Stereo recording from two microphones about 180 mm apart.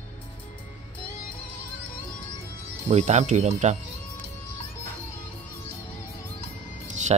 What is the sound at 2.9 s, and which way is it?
Speech, 40° right (ahead or behind).